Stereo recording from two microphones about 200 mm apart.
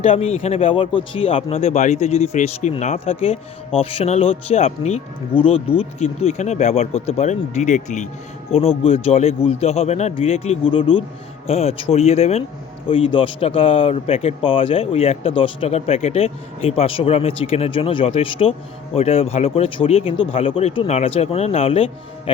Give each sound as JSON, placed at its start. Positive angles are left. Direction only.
{"t": 0.0, "sound": "speech", "side_deg": 30}